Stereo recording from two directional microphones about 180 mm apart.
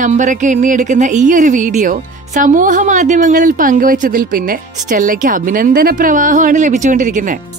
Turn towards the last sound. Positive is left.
turn(degrees=-45)  # may be behind; listen again after turning